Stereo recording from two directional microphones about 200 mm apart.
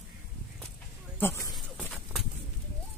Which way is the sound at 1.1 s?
10° left (ahead or behind).